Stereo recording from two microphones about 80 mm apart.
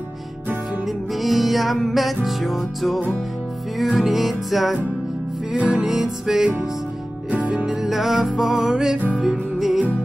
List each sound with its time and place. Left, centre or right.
0.8 s music: centre
5.6 s music: centre
5.9 s music: centre